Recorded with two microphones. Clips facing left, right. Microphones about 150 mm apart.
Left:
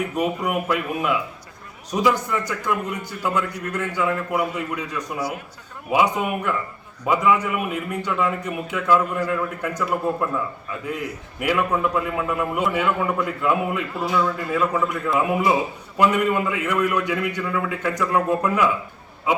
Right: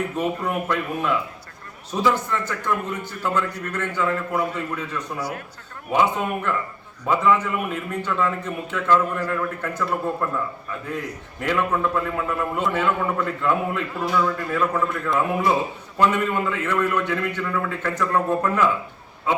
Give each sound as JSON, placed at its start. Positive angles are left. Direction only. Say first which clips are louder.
{"t": 0.2, "sound": "a man's voice", "louder": "left 3 dB", "side_deg": 10}